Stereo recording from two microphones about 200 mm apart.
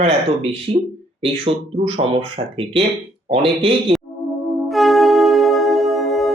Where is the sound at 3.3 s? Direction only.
30° right (ahead or behind).